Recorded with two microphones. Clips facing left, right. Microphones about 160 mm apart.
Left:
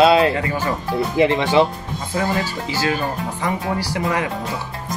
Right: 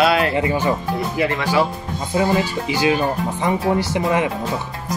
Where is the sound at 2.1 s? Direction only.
20° right (ahead or behind).